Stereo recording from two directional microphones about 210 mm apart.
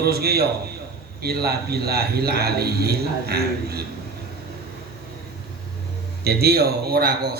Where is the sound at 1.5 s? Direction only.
50° right (ahead or behind).